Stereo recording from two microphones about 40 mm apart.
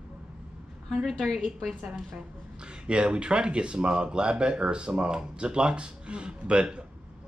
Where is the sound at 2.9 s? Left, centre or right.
Right.